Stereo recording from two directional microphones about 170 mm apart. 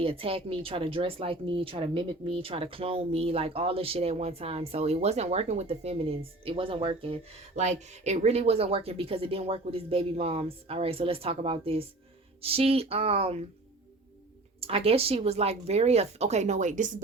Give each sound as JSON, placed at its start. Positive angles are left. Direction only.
{"t": 0.0, "sound": "speech", "side_deg": -35}
{"t": 14.6, "sound": "speech", "side_deg": -35}